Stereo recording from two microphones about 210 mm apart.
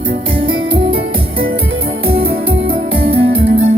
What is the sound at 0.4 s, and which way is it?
Music, 25° right (ahead or behind).